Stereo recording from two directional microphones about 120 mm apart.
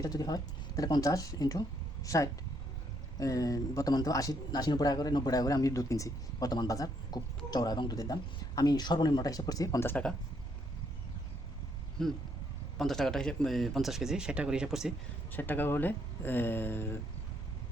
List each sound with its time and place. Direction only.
0.0 s speech: 35° left (ahead or behind)
9.8 s speech: 10° left (ahead or behind)
12.0 s speech: 5° left (ahead or behind)
15.3 s speech: 15° left (ahead or behind)